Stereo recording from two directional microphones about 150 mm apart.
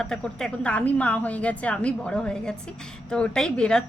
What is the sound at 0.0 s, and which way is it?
A woman's voice, 5° left (ahead or behind).